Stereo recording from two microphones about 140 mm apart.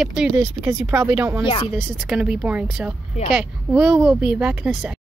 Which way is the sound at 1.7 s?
Centre (ahead or behind).